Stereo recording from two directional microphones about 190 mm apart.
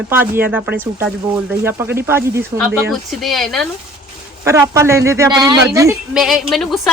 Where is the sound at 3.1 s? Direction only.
Centre (ahead or behind).